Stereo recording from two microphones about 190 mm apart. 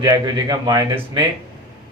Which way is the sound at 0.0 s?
20° right (ahead or behind).